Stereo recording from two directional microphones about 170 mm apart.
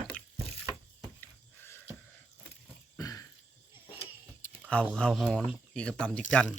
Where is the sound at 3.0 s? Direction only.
20° left (ahead or behind).